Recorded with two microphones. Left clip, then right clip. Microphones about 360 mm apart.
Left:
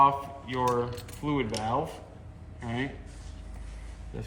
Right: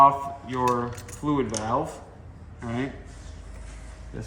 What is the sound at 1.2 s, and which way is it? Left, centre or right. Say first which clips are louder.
Speech: right 4 dB; centre.